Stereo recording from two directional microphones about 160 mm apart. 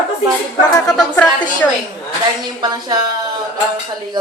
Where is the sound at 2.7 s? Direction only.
25° right (ahead or behind).